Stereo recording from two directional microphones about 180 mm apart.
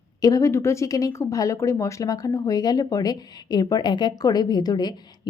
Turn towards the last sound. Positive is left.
turn(degrees=20)  # may be behind; listen again after turning